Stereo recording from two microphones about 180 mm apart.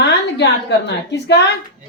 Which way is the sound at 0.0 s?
70° left (ahead or behind).